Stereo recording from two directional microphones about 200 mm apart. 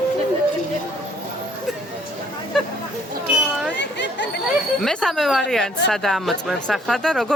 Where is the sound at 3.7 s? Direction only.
65° left (ahead or behind).